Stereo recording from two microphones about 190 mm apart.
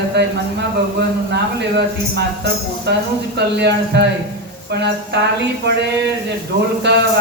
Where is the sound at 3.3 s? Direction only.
60° right (ahead or behind).